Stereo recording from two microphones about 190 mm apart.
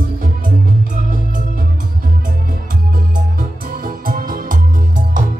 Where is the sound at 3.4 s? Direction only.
45° right (ahead or behind).